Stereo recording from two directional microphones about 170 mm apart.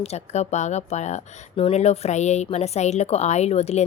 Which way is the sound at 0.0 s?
40° left (ahead or behind).